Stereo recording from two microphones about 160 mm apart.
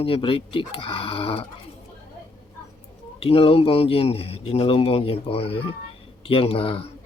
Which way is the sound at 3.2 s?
35° left (ahead or behind).